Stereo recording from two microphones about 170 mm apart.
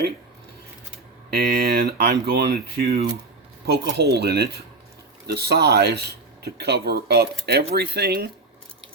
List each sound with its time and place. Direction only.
1.3 s speech: 65° right (ahead or behind)